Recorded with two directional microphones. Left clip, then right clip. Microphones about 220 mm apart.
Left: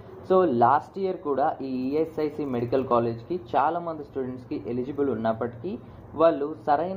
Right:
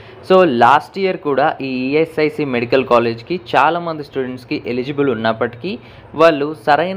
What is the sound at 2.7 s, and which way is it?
Speech, 55° right (ahead or behind).